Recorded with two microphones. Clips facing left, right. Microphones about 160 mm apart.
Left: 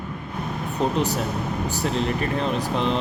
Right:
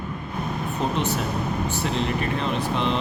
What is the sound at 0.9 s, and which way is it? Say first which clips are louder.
Speech: left 1 dB; 40° left (ahead or behind).